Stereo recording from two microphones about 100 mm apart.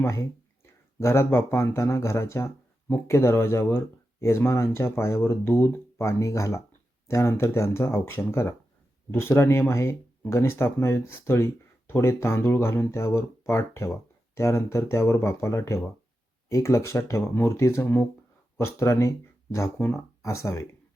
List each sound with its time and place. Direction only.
0.0 s speech: 30° left (ahead or behind)